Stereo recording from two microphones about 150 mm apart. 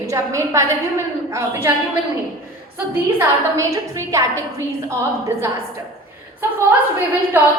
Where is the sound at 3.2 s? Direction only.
20° right (ahead or behind).